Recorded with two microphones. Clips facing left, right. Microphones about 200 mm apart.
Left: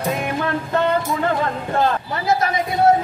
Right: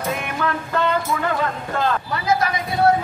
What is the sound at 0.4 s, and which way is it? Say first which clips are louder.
Music: left 2 dB; 30° left (ahead or behind).